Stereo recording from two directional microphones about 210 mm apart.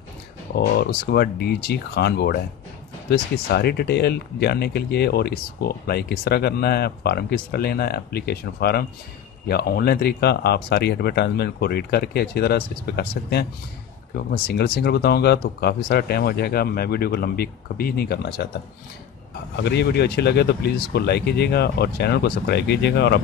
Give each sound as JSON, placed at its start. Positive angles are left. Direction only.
{"t": 0.6, "sound": "speech", "side_deg": 50}
{"t": 19.5, "sound": "speech", "side_deg": 55}